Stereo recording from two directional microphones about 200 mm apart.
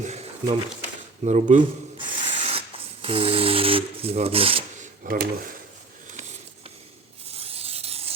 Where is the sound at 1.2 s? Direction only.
35° right (ahead or behind).